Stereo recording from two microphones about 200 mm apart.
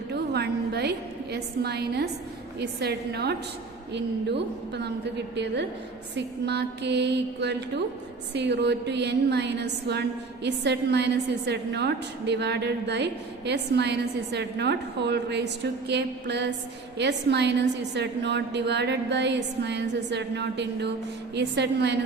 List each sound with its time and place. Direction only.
0.1 s a woman's voice: 55° right (ahead or behind)